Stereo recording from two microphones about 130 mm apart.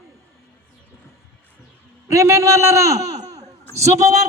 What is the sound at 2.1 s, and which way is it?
A man's voice, 20° right (ahead or behind).